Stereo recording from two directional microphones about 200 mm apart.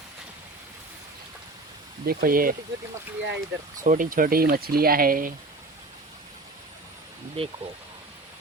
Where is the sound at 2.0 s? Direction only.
45° right (ahead or behind).